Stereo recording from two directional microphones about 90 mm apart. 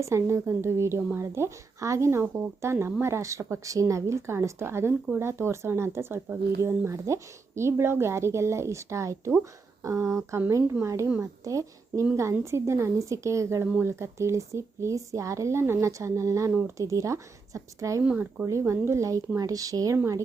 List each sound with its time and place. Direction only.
0.0 s speech: 30° right (ahead or behind)
18.0 s speech: 15° right (ahead or behind)
18.4 s speech: 30° right (ahead or behind)